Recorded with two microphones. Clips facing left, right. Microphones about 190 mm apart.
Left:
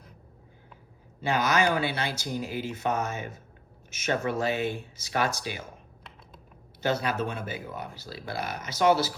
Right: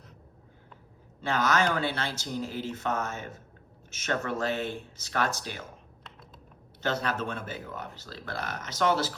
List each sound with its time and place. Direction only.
1.2 s speech: 10° left (ahead or behind)
6.8 s speech: 10° left (ahead or behind)